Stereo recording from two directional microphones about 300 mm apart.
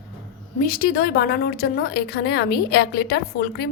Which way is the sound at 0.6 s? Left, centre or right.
Left.